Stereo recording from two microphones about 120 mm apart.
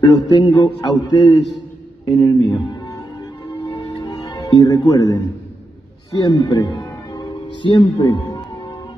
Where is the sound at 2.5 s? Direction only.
35° left (ahead or behind).